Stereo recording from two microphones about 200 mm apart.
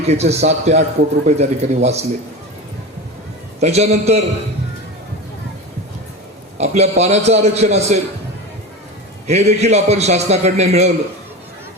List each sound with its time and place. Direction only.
0.0 s a man's voice: 30° right (ahead or behind)
3.6 s a man's voice: 30° right (ahead or behind)
6.6 s a man's voice: 35° right (ahead or behind)
9.2 s a man's voice: 35° right (ahead or behind)